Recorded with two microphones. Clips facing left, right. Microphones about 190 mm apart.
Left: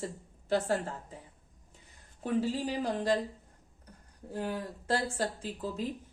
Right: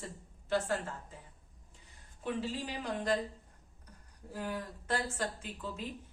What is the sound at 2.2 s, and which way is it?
Speech, 40° left (ahead or behind).